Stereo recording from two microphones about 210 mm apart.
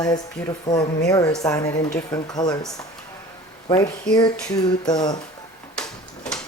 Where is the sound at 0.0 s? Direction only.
15° left (ahead or behind).